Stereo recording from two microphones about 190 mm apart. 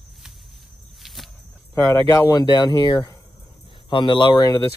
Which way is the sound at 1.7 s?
15° left (ahead or behind).